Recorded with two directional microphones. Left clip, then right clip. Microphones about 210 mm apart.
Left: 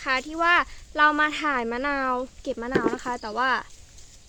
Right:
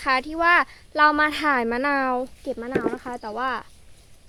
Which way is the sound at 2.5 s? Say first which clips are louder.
Left 2 dB; 5° right (ahead or behind).